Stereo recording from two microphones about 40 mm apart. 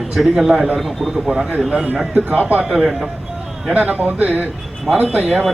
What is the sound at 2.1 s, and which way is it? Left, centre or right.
Speech, right.